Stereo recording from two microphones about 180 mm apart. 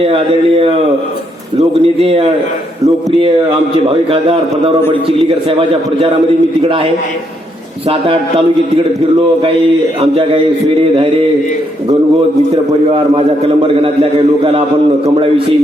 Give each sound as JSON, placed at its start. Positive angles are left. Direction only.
{"t": 1.5, "sound": "a man's voice", "side_deg": -30}
{"t": 7.9, "sound": "a man's voice", "side_deg": -30}
{"t": 10.0, "sound": "a man's voice", "side_deg": -30}
{"t": 13.6, "sound": "a man's voice", "side_deg": -30}